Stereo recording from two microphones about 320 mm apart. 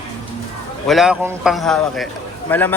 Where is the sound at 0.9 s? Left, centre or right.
Centre.